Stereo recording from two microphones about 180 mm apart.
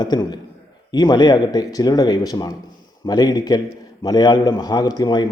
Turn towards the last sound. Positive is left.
turn(degrees=25)  # may be behind; listen again after turning